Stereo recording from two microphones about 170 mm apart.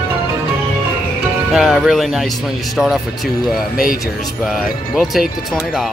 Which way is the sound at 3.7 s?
55° left (ahead or behind).